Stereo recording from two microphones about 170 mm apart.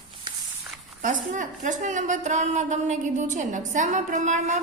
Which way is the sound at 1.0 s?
50° right (ahead or behind).